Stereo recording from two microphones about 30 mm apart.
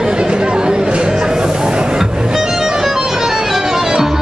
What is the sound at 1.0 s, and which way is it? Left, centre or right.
Music, right.